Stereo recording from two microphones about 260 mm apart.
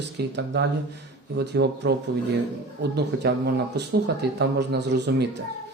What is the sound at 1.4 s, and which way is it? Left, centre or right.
Speech, right.